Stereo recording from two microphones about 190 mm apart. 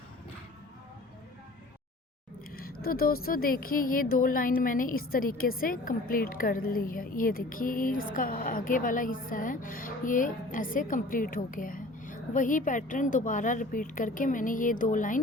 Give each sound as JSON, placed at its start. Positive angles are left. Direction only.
{"t": 2.6, "sound": "speech", "side_deg": 50}